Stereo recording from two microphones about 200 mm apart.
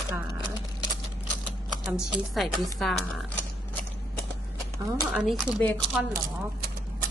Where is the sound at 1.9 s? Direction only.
5° right (ahead or behind).